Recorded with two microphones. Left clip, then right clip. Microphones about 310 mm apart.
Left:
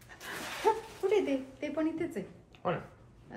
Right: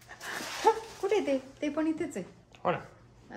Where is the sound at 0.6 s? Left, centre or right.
Right.